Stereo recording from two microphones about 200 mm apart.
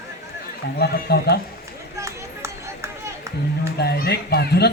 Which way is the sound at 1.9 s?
15° right (ahead or behind).